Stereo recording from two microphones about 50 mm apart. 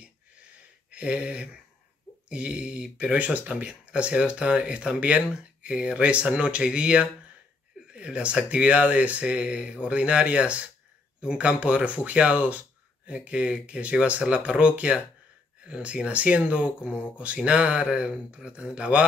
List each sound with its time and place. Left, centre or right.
0.9 s speech: right